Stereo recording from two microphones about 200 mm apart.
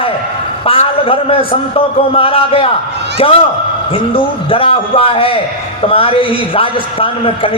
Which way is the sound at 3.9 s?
25° left (ahead or behind).